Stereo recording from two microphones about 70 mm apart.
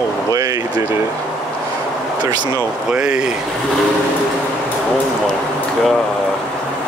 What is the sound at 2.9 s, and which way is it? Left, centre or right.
Speech, centre.